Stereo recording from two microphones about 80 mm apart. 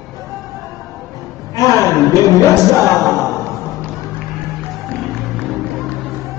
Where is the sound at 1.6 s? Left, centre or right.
Left.